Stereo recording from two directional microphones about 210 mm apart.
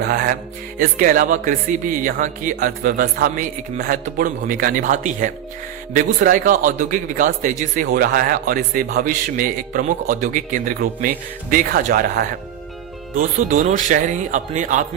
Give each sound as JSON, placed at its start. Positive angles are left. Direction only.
{"t": 0.1, "sound": "music", "side_deg": -45}
{"t": 0.8, "sound": "a man's voice", "side_deg": -40}